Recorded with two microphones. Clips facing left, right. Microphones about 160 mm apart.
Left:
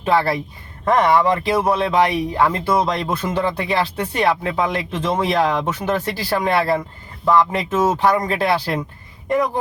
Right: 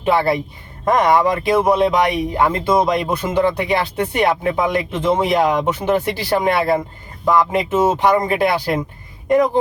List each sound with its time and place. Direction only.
0.0 s speech: 15° right (ahead or behind)